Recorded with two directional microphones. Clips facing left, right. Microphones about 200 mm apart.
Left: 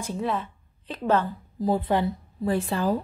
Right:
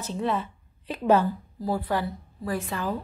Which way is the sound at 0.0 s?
10° left (ahead or behind).